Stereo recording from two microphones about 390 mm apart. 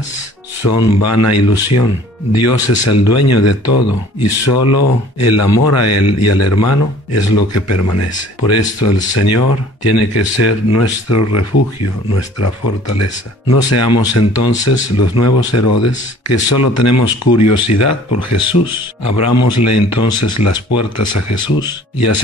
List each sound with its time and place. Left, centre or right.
0.6 s speech: left